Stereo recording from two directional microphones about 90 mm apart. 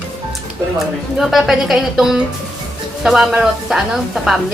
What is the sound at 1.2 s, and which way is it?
A woman's voice, centre (ahead or behind).